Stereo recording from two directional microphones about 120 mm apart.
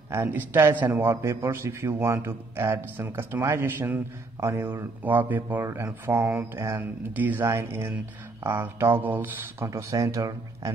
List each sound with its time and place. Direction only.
0.1 s a man's voice: 20° right (ahead or behind)